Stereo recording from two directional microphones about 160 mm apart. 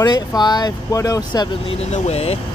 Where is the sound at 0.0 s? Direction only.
25° left (ahead or behind).